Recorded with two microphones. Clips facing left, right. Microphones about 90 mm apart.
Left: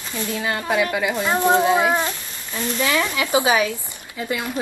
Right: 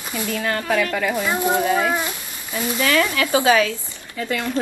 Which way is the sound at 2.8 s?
15° left (ahead or behind).